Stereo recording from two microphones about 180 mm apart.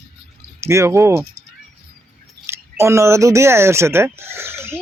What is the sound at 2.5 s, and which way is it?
Speech, 15° right (ahead or behind).